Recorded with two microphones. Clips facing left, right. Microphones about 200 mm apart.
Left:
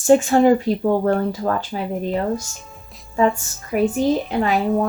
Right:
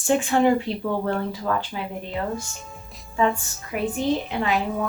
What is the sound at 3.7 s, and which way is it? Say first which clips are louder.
Speech: left 8 dB; 40° left (ahead or behind).